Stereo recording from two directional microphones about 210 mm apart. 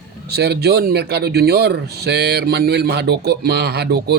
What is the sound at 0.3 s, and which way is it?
Speech, 50° right (ahead or behind).